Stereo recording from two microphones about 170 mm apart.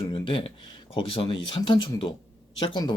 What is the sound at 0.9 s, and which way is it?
Speech, 30° left (ahead or behind).